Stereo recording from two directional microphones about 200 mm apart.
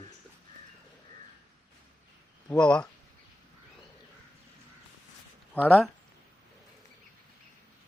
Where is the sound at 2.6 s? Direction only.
5° left (ahead or behind).